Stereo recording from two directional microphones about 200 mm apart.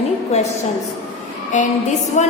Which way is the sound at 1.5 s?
35° left (ahead or behind).